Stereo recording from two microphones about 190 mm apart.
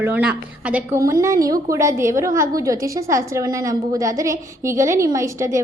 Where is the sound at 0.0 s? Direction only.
5° right (ahead or behind).